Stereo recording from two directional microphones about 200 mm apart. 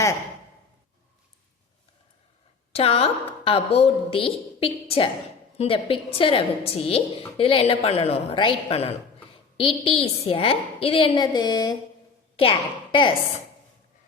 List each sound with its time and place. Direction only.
2.7 s a woman's voice: 30° left (ahead or behind)